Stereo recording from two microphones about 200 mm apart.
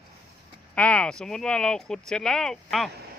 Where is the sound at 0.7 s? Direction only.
5° left (ahead or behind).